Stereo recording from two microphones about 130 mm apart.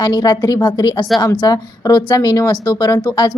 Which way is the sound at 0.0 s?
30° left (ahead or behind).